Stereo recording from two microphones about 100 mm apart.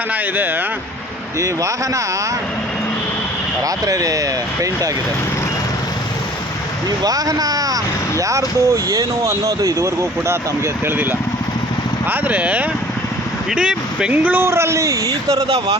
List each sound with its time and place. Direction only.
0.1 s speech: 20° right (ahead or behind)
1.4 s speech: 30° right (ahead or behind)
3.6 s speech: 35° right (ahead or behind)
7.0 s speech: 40° right (ahead or behind)